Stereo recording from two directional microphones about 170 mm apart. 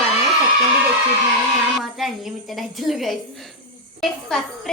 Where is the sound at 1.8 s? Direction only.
Centre (ahead or behind).